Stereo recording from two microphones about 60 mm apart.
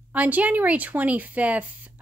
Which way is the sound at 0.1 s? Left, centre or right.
Right.